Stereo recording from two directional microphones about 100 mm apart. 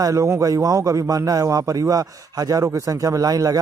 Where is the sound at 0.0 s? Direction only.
35° right (ahead or behind).